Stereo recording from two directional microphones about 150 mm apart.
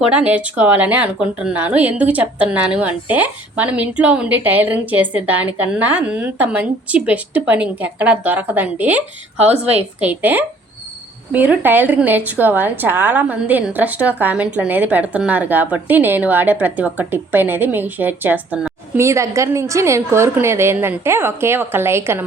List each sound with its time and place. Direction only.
0.1 s a woman's voice: 10° right (ahead or behind)